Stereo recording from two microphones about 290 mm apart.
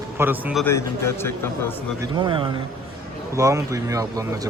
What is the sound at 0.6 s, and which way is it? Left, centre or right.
A man's voice, centre.